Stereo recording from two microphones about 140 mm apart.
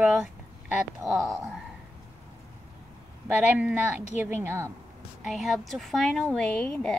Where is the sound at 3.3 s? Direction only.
10° right (ahead or behind).